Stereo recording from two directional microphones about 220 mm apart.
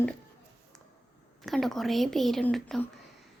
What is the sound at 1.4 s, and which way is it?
Speech, centre (ahead or behind).